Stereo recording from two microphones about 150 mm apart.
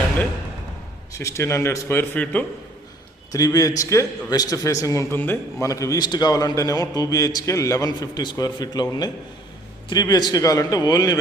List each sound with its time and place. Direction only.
1.2 s speech: 20° left (ahead or behind)
3.3 s a man's voice: 25° left (ahead or behind)